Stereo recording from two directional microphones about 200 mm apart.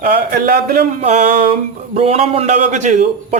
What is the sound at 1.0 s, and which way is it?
A man's voice, 35° right (ahead or behind).